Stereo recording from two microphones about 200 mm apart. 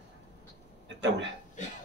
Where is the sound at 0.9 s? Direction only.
65° right (ahead or behind).